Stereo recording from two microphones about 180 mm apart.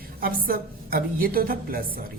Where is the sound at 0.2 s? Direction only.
55° right (ahead or behind).